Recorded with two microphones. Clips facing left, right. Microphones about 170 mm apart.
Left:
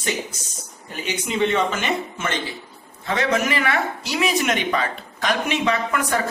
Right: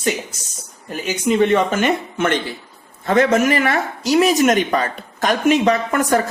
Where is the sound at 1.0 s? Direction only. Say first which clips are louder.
Right 6 dB; 45° right (ahead or behind).